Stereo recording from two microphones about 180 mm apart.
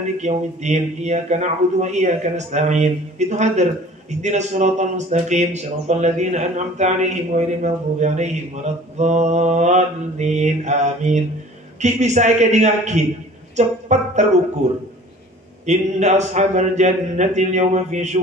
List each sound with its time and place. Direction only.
0.2 s speech: 40° right (ahead or behind)
15.6 s speech: 40° right (ahead or behind)